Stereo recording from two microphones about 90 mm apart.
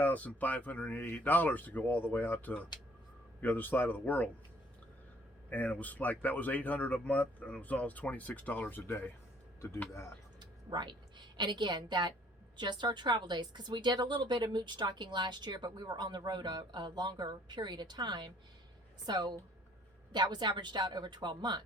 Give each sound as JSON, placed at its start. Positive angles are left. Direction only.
{"t": 0.0, "sound": "speech", "side_deg": 15}
{"t": 5.5, "sound": "speech", "side_deg": 15}
{"t": 10.4, "sound": "a woman's voice", "side_deg": -55}